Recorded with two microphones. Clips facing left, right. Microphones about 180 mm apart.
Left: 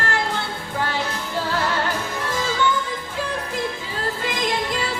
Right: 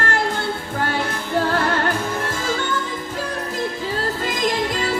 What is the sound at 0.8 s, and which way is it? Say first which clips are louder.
Music: right 5 dB; 50° right (ahead or behind).